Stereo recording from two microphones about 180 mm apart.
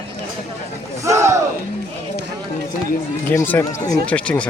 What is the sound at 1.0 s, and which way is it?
Battle cry, 15° right (ahead or behind).